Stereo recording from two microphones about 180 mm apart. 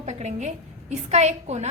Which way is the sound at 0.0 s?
40° right (ahead or behind).